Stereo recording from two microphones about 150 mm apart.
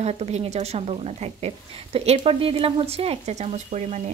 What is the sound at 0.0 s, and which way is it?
A woman's voice, 45° right (ahead or behind).